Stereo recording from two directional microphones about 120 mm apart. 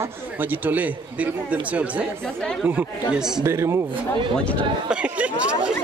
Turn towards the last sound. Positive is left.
turn(degrees=-10)  # may be behind; listen again after turning